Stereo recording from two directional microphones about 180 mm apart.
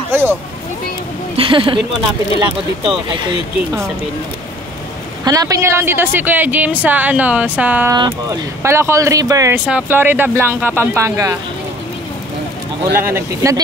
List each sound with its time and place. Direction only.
0.1 s vehicle: 10° right (ahead or behind)
1.3 s speech: 30° right (ahead or behind)
5.2 s a woman's voice: 20° right (ahead or behind)
7.9 s a woman's voice: 20° right (ahead or behind)
12.9 s a woman's voice: 15° right (ahead or behind)